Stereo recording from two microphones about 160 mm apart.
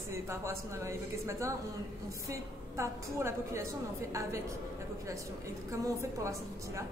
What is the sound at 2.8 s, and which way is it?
A woman's voice, 15° right (ahead or behind).